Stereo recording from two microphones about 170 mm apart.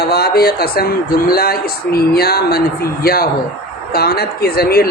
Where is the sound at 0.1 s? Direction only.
70° left (ahead or behind).